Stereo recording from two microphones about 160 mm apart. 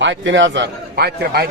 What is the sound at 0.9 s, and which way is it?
Speech, 85° right.